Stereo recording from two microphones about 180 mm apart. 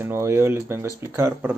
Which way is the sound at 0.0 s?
15° right (ahead or behind).